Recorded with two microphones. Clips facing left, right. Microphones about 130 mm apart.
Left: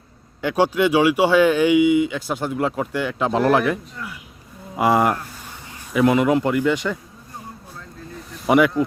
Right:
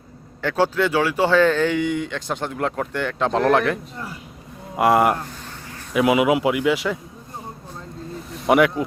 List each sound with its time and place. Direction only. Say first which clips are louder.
0.4 s speech: left 2 dB; 15° left (ahead or behind)
3.9 s speech: right 1 dB; 30° right (ahead or behind)
4.8 s speech: right 1 dB; centre (ahead or behind)
8.3 s a sound: even; centre (ahead or behind)